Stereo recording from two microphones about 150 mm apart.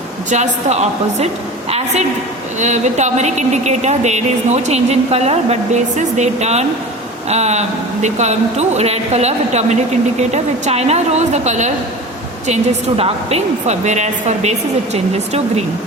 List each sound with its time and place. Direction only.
0.3 s speech: 50° right (ahead or behind)
2.6 s speech: 50° right (ahead or behind)
13.0 s speech: 40° right (ahead or behind)